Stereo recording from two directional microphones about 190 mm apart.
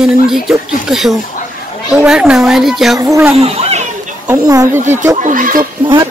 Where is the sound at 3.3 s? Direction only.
30° right (ahead or behind).